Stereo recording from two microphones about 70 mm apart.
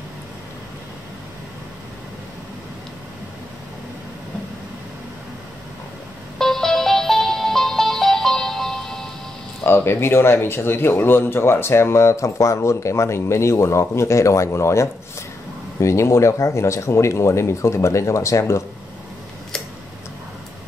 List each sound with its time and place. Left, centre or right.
6.3 s music: centre
9.6 s speech: left